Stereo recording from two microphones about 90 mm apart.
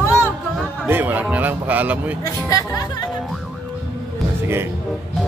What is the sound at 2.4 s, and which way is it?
Speech, 40° left (ahead or behind).